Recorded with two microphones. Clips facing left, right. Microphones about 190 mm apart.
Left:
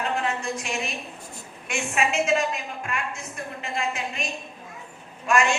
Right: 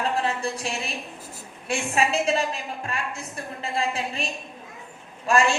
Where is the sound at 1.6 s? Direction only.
35° right (ahead or behind).